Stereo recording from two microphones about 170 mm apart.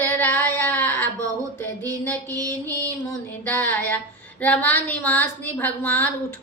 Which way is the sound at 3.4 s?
10° left (ahead or behind).